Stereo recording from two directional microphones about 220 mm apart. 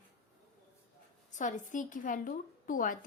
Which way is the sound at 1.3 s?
35° left (ahead or behind).